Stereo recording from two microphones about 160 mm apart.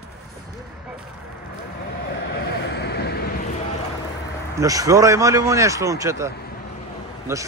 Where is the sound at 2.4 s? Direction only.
90° left.